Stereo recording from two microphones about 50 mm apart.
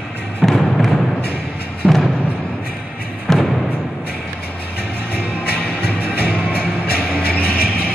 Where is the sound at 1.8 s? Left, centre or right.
Right.